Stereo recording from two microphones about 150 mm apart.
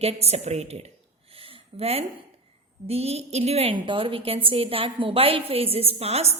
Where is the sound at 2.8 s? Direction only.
45° right (ahead or behind).